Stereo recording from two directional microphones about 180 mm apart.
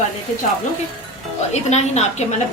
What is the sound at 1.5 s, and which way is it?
Speech, 40° left (ahead or behind).